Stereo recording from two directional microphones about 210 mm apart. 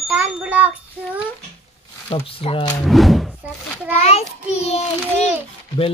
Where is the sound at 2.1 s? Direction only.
25° left (ahead or behind).